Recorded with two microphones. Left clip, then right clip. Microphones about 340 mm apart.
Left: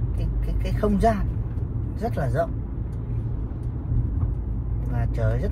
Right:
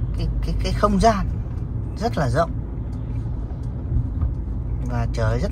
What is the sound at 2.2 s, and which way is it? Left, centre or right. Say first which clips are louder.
Speech: right 4 dB; centre.